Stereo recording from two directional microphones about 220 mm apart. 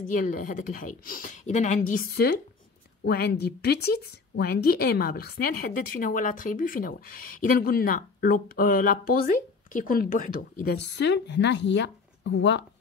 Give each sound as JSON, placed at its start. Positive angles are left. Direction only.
{"t": 0.0, "sound": "speech", "side_deg": 40}